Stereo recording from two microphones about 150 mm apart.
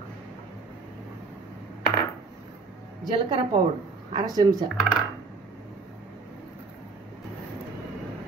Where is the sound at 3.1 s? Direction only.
30° right (ahead or behind).